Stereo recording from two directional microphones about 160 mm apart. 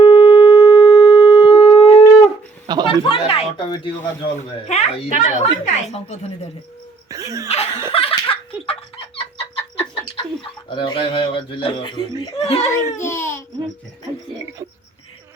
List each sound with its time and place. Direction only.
0.0 s shofar: 35° left (ahead or behind)
2.8 s a sound: 35° left (ahead or behind)
4.5 s speech: 45° left (ahead or behind)
7.1 s laughter: 20° right (ahead or behind)
7.4 s speech: 40° left (ahead or behind)
7.9 s laughter: 35° left (ahead or behind)
9.1 s chicken: 35° left (ahead or behind)
12.2 s speech: 35° left (ahead or behind)
12.7 s a child's voice: 15° left (ahead or behind)